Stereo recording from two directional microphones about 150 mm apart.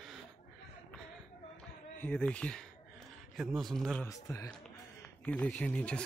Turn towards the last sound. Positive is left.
turn(degrees=10)  # may be behind; listen again after turning